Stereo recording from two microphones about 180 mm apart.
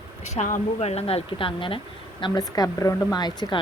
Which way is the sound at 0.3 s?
45° left (ahead or behind).